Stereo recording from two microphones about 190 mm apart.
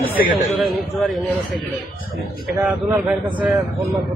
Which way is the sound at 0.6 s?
Centre (ahead or behind).